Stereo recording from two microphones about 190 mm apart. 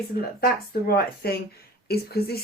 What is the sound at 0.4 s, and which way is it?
Speech, 55° left (ahead or behind).